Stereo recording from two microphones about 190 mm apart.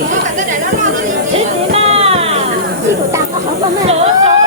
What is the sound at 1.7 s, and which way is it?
Music, 30° right (ahead or behind).